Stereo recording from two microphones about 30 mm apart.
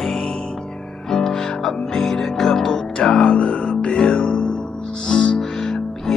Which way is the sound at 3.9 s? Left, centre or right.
Left.